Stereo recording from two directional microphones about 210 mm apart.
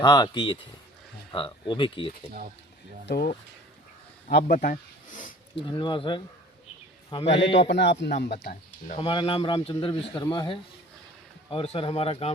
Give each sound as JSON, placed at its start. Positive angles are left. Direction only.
{"t": 0.0, "sound": "a man's voice", "side_deg": 20}
{"t": 3.1, "sound": "speech", "side_deg": 45}
{"t": 4.4, "sound": "speech", "side_deg": 40}
{"t": 5.6, "sound": "a man's voice", "side_deg": 25}
{"t": 7.7, "sound": "speech", "side_deg": 55}
{"t": 9.0, "sound": "a man's voice", "side_deg": 25}